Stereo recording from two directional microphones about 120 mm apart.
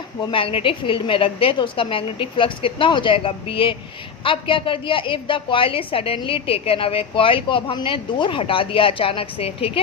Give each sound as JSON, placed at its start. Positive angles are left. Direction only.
{"t": 0.3, "sound": "a woman's voice", "side_deg": 50}